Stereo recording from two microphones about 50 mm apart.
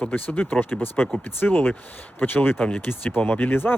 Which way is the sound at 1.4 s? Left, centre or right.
Left.